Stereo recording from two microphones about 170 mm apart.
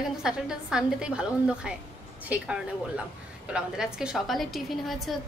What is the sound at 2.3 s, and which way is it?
Speech, 5° right (ahead or behind).